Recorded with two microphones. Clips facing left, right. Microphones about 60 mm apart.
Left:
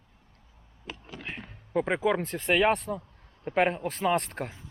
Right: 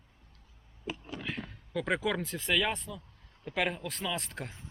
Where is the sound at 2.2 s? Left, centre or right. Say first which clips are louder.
Left 6 dB; left.